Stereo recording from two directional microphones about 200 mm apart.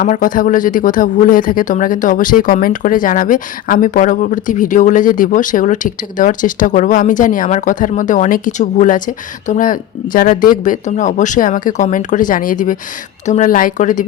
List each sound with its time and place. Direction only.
0.0 s speech: 40° left (ahead or behind)